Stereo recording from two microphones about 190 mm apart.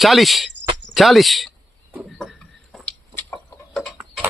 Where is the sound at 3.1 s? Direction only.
10° left (ahead or behind).